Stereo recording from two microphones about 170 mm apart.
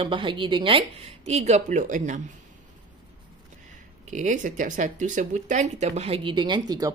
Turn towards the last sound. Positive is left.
turn(degrees=-25)  # may be behind; listen again after turning